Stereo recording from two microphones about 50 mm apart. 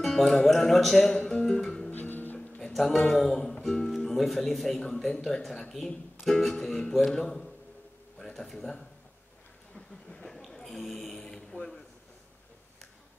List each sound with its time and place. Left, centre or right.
0.0 s speech: centre
1.1 s music: centre
1.9 s music: left
2.7 s a man's voice: centre
9.8 s a sound: centre
10.9 s mantra: centre